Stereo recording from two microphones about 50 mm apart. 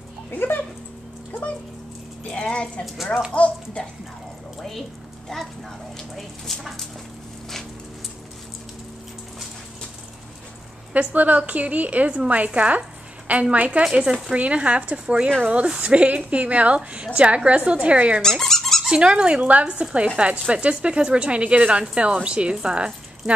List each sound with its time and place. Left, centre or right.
0.3 s speech: left
2.3 s a sound: left
3.3 s speech: centre
4.6 s speech: centre
5.9 s speech: centre
10.9 s speech: right
18.2 s squeak: centre
18.9 s speech: centre